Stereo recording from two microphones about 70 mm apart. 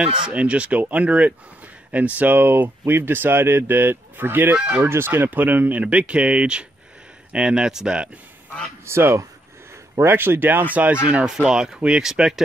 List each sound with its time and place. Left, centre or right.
0.0 s speech: centre
4.8 s speech: right; by 8.1 s centre
8.8 s speech: right; by 12.4 s centre